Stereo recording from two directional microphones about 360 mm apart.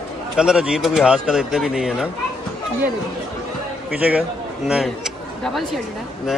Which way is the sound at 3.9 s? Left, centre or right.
Centre.